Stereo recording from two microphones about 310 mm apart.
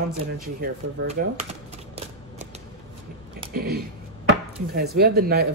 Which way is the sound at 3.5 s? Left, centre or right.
Right.